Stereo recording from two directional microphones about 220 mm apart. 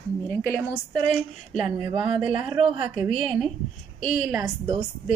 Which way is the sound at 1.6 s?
20° right (ahead or behind).